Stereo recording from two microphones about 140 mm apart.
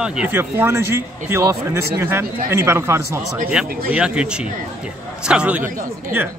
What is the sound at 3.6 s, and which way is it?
Speech, 5° right (ahead or behind).